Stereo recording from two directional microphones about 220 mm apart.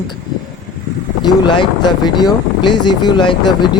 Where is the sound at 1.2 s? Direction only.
20° left (ahead or behind).